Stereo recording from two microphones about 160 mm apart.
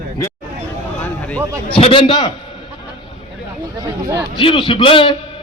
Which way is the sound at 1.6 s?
35° left (ahead or behind).